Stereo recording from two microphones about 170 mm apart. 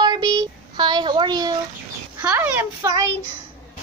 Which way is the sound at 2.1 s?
10° right (ahead or behind).